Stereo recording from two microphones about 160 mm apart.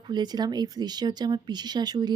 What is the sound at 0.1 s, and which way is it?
Speech, 25° right (ahead or behind).